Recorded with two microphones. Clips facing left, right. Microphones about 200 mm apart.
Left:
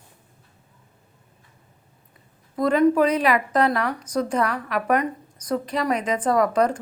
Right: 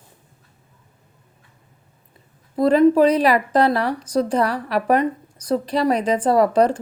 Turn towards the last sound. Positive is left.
turn(degrees=-30)  # may be behind; listen again after turning